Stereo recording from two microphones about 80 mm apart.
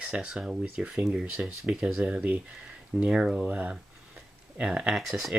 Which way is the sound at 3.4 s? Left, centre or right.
Centre.